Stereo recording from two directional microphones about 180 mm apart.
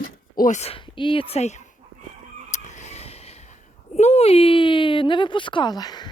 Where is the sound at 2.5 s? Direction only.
40° left (ahead or behind).